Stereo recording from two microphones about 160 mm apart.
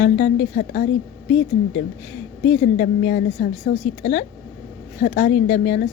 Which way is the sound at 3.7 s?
35° left (ahead or behind).